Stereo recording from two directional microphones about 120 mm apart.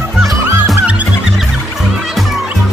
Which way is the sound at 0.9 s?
10° right (ahead or behind).